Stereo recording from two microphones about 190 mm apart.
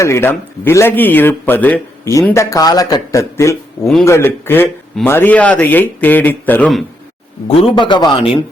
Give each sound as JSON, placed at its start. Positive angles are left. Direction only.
{"t": 0.0, "sound": "speech", "side_deg": 15}
{"t": 7.4, "sound": "a man's voice", "side_deg": 30}